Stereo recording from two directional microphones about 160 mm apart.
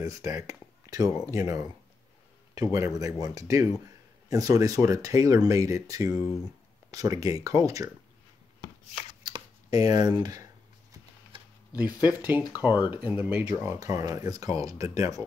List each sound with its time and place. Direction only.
0.0 s speech: 20° right (ahead or behind)
9.2 s a sound: 25° right (ahead or behind)
11.9 s speech: 25° left (ahead or behind)
12.9 s speech: 10° right (ahead or behind)